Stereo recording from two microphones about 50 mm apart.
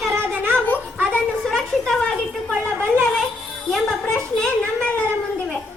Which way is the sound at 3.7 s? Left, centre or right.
Centre.